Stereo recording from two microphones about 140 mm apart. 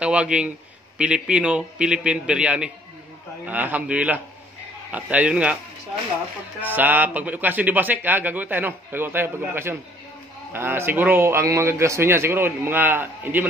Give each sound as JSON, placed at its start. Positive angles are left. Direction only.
{"t": 0.0, "sound": "a man's voice", "side_deg": -10}
{"t": 6.6, "sound": "a man's voice", "side_deg": -15}